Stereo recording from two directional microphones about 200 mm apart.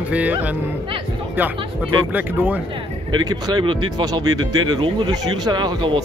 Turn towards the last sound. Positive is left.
turn(degrees=-20)  # may be behind; listen again after turning